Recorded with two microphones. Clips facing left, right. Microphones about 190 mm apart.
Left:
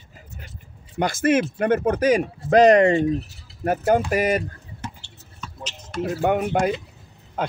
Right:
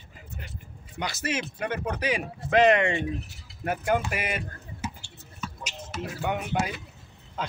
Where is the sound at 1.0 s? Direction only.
50° left (ahead or behind).